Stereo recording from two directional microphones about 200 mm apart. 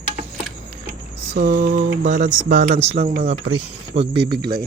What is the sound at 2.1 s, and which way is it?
Speech, 40° right (ahead or behind).